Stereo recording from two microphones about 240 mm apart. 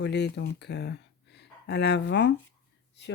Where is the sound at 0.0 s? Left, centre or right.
Left.